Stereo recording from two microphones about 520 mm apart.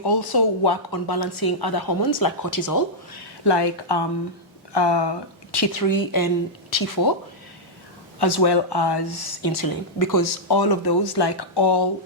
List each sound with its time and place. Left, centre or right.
0.0 s speech: left
3.5 s speech: left
5.5 s speech: left
8.2 s speech: left